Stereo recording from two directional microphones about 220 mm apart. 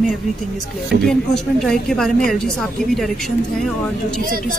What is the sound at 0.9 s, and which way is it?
Speech, 45° right (ahead or behind).